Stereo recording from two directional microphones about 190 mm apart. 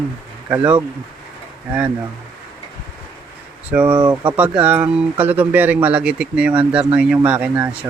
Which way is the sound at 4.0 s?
25° right (ahead or behind).